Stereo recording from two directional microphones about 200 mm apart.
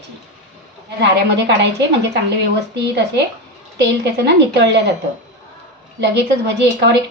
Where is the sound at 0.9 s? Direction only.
60° right (ahead or behind).